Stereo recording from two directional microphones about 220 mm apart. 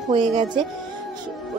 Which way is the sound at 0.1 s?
20° right (ahead or behind).